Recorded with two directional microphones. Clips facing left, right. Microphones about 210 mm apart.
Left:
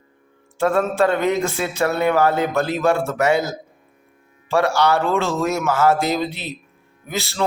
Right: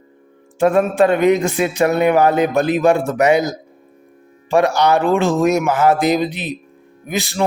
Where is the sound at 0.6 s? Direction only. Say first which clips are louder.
Right 4 dB; 15° right (ahead or behind).